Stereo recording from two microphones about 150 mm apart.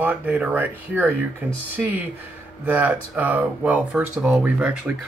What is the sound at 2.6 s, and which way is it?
Speech, 10° right (ahead or behind).